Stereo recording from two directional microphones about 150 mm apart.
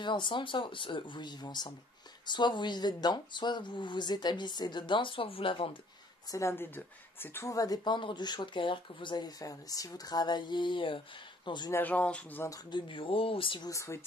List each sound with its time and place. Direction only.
0.0 s speech: 30° left (ahead or behind)
6.3 s speech: 15° left (ahead or behind)
11.7 s speech: 10° left (ahead or behind)
12.4 s speech: 30° left (ahead or behind)
13.7 s speech: 20° left (ahead or behind)